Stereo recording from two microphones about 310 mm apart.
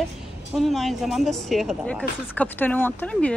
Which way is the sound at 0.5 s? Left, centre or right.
Centre.